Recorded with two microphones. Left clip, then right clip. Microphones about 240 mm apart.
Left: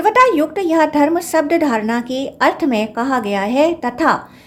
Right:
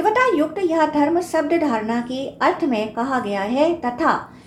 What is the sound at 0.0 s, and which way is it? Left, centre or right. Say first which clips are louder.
A woman's voice: left 5 dB; left.